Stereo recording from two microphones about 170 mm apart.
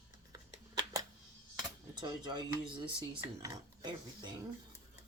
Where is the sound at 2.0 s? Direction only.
25° right (ahead or behind).